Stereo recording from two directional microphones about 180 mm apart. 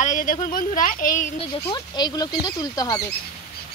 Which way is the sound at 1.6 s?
25° left (ahead or behind).